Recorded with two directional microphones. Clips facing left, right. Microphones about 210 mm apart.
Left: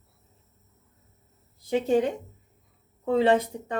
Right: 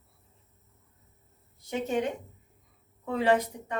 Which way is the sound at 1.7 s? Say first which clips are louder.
Left 6 dB; 30° left (ahead or behind).